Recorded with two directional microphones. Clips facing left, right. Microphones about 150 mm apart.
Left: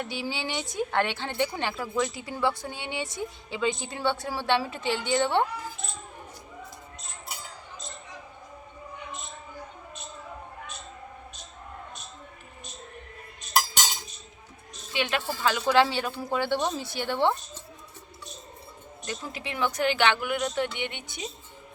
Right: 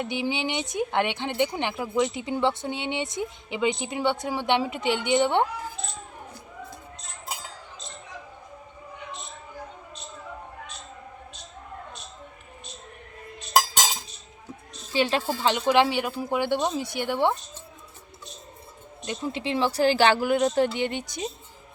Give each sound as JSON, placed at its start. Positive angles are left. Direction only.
{"t": 0.0, "sound": "speech", "side_deg": -20}
{"t": 7.3, "sound": "a sound", "side_deg": -90}
{"t": 13.5, "sound": "cutlery", "side_deg": -90}
{"t": 14.9, "sound": "speech", "side_deg": -35}
{"t": 15.4, "sound": "speech", "side_deg": -20}
{"t": 19.0, "sound": "speech", "side_deg": -25}